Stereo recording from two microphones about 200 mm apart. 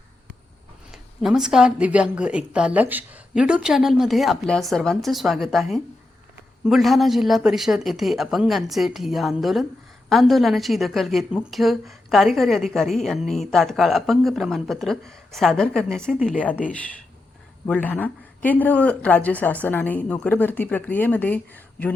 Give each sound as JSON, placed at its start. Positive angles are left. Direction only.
{"t": 0.9, "sound": "speech", "side_deg": -5}
{"t": 17.7, "sound": "speech", "side_deg": 5}